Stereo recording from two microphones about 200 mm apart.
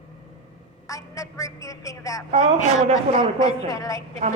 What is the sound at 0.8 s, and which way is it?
A woman's voice, 15° left (ahead or behind).